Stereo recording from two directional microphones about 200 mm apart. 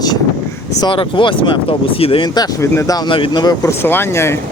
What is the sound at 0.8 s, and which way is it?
Speech, 25° left (ahead or behind).